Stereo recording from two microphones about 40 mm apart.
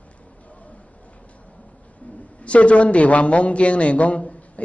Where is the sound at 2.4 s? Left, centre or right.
Left.